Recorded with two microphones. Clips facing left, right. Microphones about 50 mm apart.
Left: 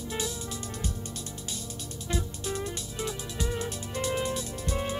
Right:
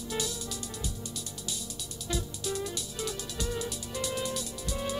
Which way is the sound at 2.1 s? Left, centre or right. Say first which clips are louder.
Left 1 dB; left.